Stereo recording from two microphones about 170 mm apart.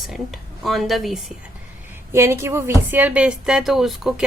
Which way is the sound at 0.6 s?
Centre (ahead or behind).